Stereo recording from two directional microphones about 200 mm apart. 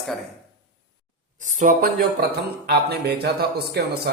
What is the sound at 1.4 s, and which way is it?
Speech, 40° right (ahead or behind).